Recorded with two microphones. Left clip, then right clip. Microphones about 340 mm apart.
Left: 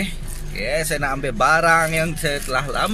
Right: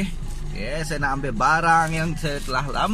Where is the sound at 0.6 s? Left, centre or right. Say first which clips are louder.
Left 5 dB; left.